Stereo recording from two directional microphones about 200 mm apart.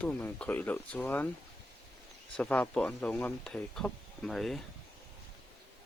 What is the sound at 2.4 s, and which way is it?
Speech, 5° left (ahead or behind).